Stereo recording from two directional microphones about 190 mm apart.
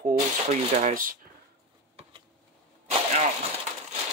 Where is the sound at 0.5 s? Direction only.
35° right (ahead or behind).